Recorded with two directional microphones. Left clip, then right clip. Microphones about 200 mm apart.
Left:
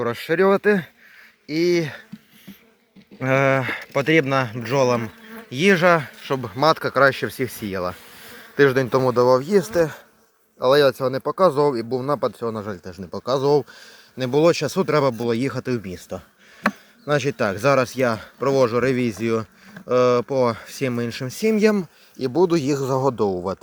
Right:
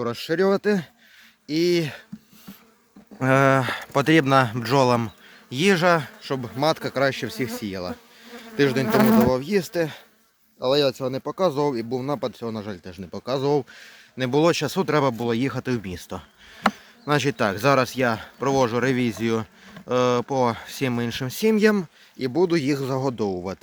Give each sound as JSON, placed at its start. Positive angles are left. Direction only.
{"t": 0.0, "sound": "speech", "side_deg": -10}
{"t": 3.2, "sound": "speech", "side_deg": -20}
{"t": 5.5, "sound": "speech", "side_deg": -10}